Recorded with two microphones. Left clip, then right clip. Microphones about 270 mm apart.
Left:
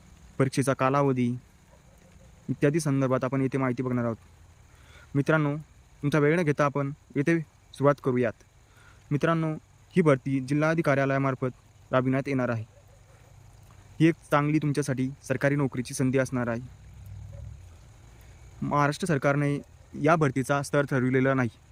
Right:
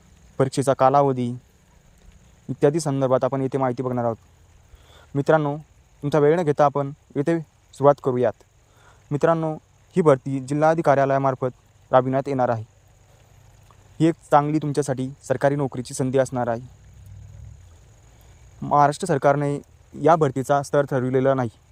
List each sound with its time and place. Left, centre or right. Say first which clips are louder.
0.3 s speech: right 6 dB; centre
2.6 s speech: right 6 dB; centre
14.0 s speech: right 6 dB; centre
18.7 s speech: right 8 dB; centre